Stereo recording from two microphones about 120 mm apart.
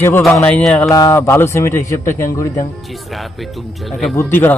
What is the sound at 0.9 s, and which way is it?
A man's voice, 25° left (ahead or behind).